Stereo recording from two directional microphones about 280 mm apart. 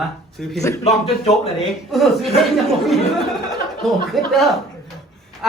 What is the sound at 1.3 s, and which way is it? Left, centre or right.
Speech, centre.